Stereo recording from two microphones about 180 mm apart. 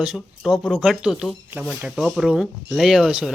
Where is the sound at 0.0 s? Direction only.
Centre (ahead or behind).